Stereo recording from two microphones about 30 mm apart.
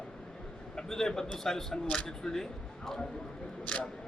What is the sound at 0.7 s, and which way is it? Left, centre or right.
A man's voice, centre.